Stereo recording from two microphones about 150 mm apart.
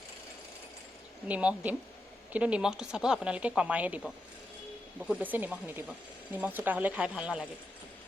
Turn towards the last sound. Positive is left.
turn(degrees=-5)  # may be behind; listen again after turning